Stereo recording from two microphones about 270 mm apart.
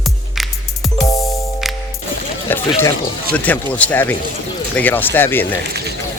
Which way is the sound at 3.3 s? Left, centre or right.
Centre.